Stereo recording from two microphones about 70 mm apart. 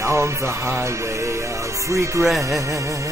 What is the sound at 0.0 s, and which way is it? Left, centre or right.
Music, right.